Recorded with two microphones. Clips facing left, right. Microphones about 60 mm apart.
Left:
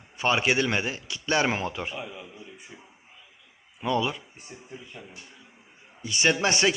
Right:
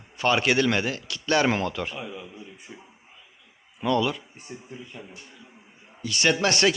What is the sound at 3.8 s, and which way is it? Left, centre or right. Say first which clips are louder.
Speech: right 3 dB; centre.